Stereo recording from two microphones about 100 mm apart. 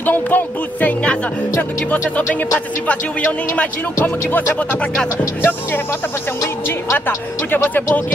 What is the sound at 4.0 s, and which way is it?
Speech, 20° left (ahead or behind).